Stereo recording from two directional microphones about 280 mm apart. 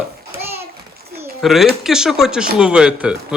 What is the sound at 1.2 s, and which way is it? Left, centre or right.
Bird, centre.